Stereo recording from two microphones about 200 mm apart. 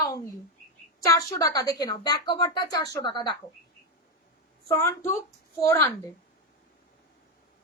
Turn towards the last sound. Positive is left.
turn(degrees=15)  # may be behind; listen again after turning